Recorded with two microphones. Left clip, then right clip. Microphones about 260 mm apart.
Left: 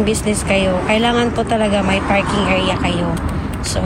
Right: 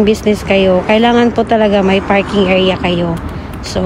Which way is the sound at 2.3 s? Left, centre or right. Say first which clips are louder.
Right 5 dB; right.